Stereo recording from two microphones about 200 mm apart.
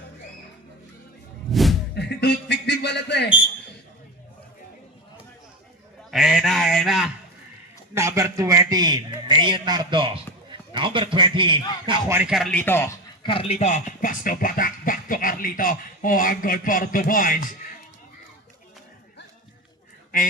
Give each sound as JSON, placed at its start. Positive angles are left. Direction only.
{"t": 1.5, "sound": "music", "side_deg": 0}
{"t": 2.0, "sound": "a sound", "side_deg": 55}
{"t": 6.1, "sound": "honk", "side_deg": 0}
{"t": 7.9, "sound": "a man's voice", "side_deg": -15}
{"t": 12.0, "sound": "speech", "side_deg": -10}
{"t": 13.2, "sound": "speech", "side_deg": 25}